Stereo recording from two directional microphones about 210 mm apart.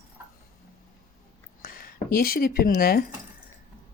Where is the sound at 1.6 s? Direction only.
40° left (ahead or behind).